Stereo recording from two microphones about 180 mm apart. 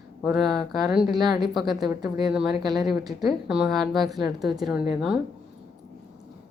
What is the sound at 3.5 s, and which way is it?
Speech, 5° right (ahead or behind).